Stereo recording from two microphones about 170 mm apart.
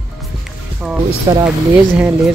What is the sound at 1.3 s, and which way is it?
Speech, 25° right (ahead or behind).